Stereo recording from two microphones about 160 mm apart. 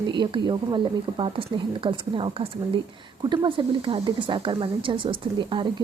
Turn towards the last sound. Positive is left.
turn(degrees=-30)  # may be behind; listen again after turning